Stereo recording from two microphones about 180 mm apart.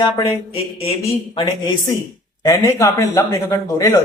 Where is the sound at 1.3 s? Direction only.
20° left (ahead or behind).